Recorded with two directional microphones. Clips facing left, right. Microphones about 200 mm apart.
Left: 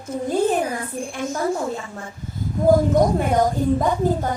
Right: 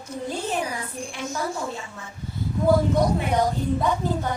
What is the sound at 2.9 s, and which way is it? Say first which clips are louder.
A woman's voice: left 4 dB; 45° left (ahead or behind).